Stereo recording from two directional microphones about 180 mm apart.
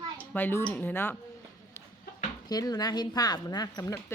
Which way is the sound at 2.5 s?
20° left (ahead or behind).